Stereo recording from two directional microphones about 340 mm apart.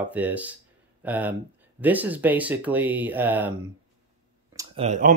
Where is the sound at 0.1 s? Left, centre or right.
Centre.